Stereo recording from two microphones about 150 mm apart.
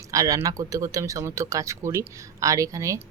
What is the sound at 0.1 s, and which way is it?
Speech, 20° right (ahead or behind).